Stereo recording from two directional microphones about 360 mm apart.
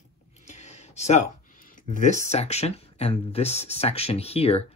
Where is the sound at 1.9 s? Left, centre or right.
Left.